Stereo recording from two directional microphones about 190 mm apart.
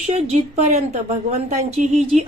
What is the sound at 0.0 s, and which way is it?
Speech, 35° right (ahead or behind).